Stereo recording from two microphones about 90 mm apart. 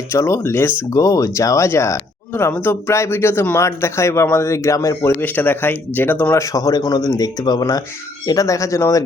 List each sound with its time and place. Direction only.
0.1 s speech: 30° left (ahead or behind)
5.2 s speech: 20° left (ahead or behind)
6.3 s speech: 40° left (ahead or behind)
8.3 s speech: 35° left (ahead or behind)